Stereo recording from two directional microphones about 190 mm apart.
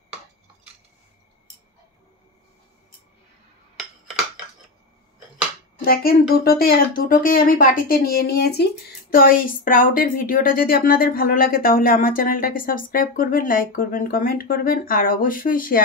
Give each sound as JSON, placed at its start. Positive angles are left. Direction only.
{"t": 5.9, "sound": "a woman's voice", "side_deg": 50}